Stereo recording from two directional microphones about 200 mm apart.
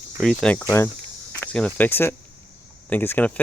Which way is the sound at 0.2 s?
5° left (ahead or behind).